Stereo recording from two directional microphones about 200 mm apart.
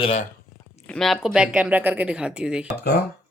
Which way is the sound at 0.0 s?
30° left (ahead or behind).